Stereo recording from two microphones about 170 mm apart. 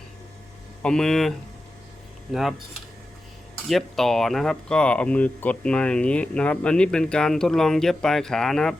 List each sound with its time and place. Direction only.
0.8 s speech: 5° left (ahead or behind)
2.3 s speech: centre (ahead or behind)
3.7 s speech: centre (ahead or behind)